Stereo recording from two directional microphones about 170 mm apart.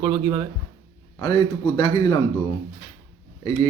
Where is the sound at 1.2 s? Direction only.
25° left (ahead or behind).